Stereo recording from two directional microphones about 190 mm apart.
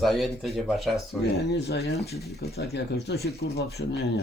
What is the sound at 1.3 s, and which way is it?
Speech, 55° left (ahead or behind).